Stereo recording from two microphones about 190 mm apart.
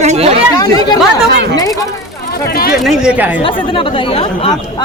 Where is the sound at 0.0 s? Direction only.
35° right (ahead or behind).